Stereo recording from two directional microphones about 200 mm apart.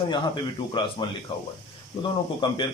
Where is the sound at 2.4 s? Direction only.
25° left (ahead or behind).